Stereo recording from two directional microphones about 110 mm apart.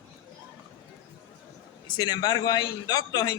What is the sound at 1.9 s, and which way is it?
A man's voice, 40° left (ahead or behind).